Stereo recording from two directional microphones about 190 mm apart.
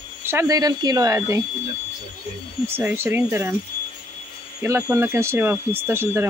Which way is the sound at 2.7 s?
10° right (ahead or behind).